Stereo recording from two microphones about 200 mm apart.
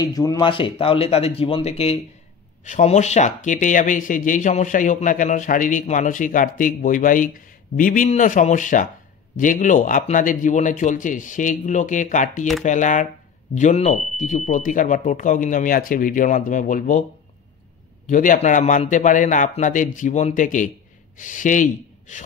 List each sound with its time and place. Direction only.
0.0 s speech: 20° left (ahead or behind); by 17.0 s 40° left (ahead or behind)
18.0 s speech: 40° left (ahead or behind)